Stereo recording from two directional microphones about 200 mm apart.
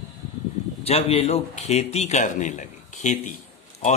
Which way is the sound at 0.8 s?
30° left (ahead or behind).